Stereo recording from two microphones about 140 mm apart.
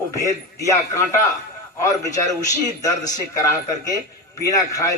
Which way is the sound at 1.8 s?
25° left (ahead or behind).